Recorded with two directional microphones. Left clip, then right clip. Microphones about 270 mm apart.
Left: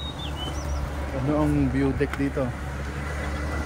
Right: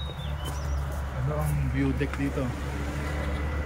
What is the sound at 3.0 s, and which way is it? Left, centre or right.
Vehicle, left.